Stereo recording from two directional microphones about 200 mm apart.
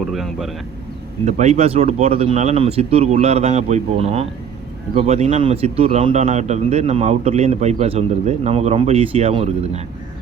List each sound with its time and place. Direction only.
0.0 s speech: centre (ahead or behind)
1.2 s a man's voice: 35° right (ahead or behind)